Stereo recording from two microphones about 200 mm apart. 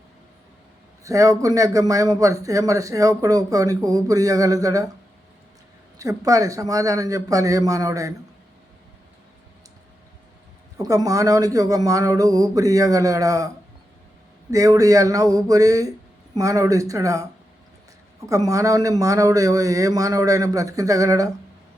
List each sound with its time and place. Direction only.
1.0 s speech: 15° right (ahead or behind)
6.0 s speech: 15° right (ahead or behind)
10.8 s speech: 15° right (ahead or behind)
14.5 s speech: 15° right (ahead or behind)
18.3 s speech: 15° right (ahead or behind)